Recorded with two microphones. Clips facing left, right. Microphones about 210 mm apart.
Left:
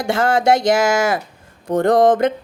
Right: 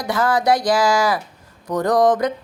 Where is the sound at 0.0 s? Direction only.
25° left (ahead or behind).